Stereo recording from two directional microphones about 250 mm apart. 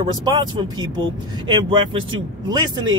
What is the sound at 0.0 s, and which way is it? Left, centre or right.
Speech, centre.